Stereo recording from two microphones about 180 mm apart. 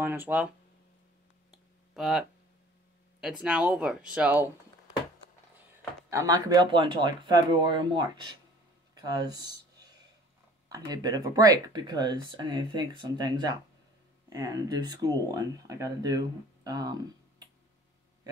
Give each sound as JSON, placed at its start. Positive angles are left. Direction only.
{"t": 0.0, "sound": "speech", "side_deg": -10}
{"t": 1.5, "sound": "clicking", "side_deg": -5}
{"t": 3.2, "sound": "speech", "side_deg": -5}
{"t": 6.0, "sound": "speech", "side_deg": -15}